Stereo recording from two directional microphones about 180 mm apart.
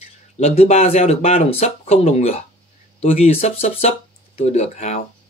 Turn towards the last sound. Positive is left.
turn(degrees=40)  # may be behind; listen again after turning